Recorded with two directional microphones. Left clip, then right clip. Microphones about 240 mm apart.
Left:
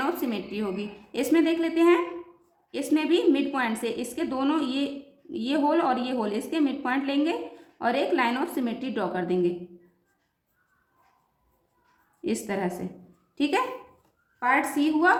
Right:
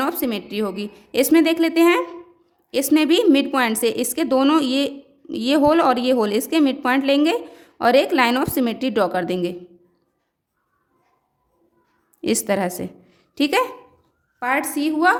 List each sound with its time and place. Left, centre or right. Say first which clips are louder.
0.0 s a woman's voice: right 5 dB; right
12.2 s a woman's voice: right 8 dB; right